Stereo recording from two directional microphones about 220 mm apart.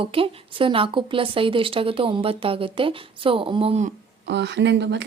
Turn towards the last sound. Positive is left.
turn(degrees=-50)  # may be behind; listen again after turning